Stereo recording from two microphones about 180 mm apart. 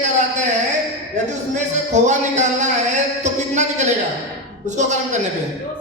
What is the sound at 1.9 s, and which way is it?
Speech, 40° right (ahead or behind).